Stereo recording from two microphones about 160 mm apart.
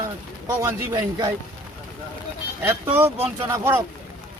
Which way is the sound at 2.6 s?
15° right (ahead or behind).